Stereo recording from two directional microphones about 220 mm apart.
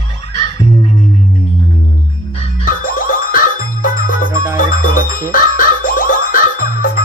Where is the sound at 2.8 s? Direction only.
40° left (ahead or behind).